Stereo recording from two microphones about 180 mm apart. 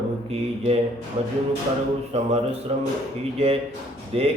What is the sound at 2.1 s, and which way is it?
A man's voice, 35° right (ahead or behind).